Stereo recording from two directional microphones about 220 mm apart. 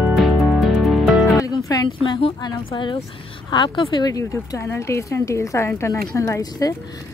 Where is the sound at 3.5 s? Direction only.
20° left (ahead or behind).